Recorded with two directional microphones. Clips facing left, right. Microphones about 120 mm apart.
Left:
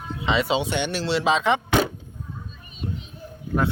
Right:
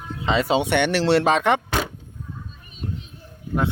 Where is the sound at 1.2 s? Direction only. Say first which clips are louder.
Right 2 dB; 55° right (ahead or behind).